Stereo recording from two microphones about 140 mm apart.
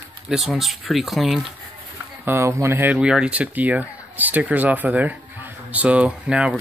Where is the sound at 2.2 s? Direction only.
20° right (ahead or behind).